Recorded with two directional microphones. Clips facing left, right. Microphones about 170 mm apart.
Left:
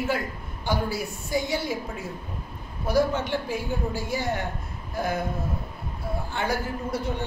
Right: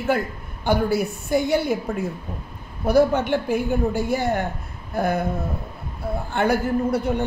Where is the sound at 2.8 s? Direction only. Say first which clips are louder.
Right 6 dB; 60° right (ahead or behind).